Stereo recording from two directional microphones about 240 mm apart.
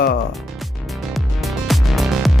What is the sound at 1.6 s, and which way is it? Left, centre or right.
Music, centre.